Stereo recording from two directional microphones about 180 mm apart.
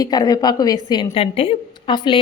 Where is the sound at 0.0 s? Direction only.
20° left (ahead or behind).